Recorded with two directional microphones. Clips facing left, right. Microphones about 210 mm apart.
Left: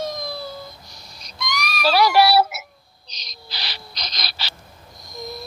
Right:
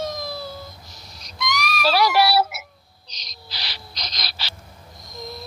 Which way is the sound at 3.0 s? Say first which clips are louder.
Left 1 dB; 65° left (ahead or behind).